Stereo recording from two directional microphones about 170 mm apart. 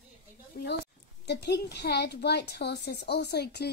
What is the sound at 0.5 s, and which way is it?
Speech, 60° left (ahead or behind).